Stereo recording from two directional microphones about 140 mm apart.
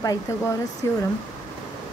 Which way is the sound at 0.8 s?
20° left (ahead or behind).